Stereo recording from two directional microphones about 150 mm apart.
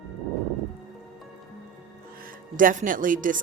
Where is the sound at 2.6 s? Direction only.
65° right (ahead or behind).